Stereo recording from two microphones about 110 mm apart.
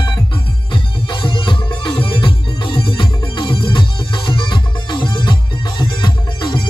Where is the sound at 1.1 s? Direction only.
45° left (ahead or behind).